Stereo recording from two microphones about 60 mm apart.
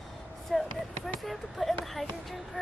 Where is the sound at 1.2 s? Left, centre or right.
Centre.